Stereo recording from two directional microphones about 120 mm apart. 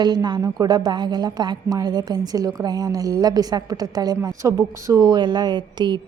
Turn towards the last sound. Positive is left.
turn(degrees=-40)  # may be behind; listen again after turning